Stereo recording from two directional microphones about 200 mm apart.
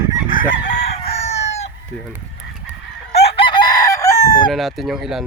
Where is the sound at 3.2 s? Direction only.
25° left (ahead or behind).